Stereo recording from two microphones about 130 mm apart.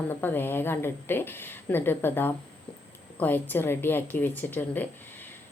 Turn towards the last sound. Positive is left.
turn(degrees=15)  # may be behind; listen again after turning